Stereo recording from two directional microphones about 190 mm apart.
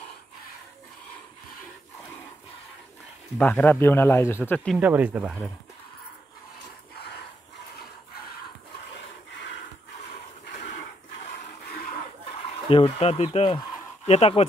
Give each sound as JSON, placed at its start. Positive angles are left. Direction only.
{"t": 3.3, "sound": "a man's voice", "side_deg": 10}
{"t": 4.7, "sound": "speech", "side_deg": -10}
{"t": 12.7, "sound": "speech", "side_deg": 30}